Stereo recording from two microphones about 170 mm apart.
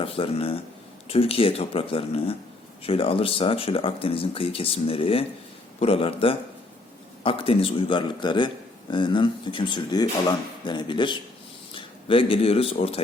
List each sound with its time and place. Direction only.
0.0 s speech: 35° left (ahead or behind)